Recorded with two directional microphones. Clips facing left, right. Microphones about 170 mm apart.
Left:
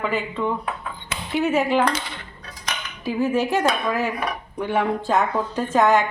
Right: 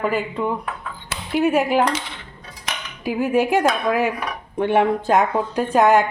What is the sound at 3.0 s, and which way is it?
A woman's voice, 15° right (ahead or behind).